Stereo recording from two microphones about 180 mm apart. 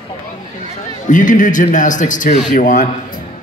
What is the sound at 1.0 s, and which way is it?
A man's voice, 45° left (ahead or behind).